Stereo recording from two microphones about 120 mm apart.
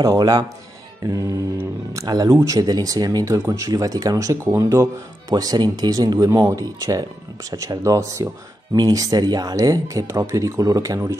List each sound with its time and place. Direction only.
0.0 s speech: 35° right (ahead or behind)